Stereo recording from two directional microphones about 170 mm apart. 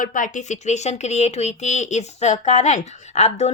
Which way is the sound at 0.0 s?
50° left (ahead or behind).